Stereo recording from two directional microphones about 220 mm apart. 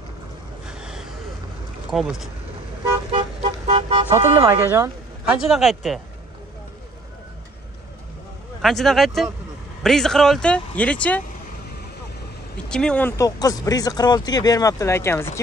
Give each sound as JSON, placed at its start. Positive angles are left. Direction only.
{"t": 0.7, "sound": "gasp", "side_deg": -5}
{"t": 1.9, "sound": "speech", "side_deg": 0}
{"t": 3.1, "sound": "toot", "side_deg": -25}
{"t": 4.6, "sound": "speech", "side_deg": -10}
{"t": 8.6, "sound": "speech", "side_deg": 0}
{"t": 12.6, "sound": "speech", "side_deg": 5}